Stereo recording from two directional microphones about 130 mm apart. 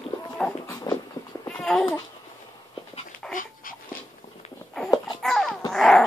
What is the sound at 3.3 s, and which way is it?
Dog, 90° left.